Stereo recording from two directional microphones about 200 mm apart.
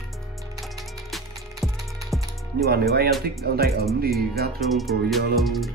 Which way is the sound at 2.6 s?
50° right (ahead or behind).